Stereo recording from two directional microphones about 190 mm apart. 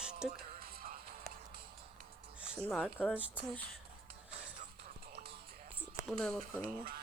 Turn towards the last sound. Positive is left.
turn(degrees=5)  # may be behind; listen again after turning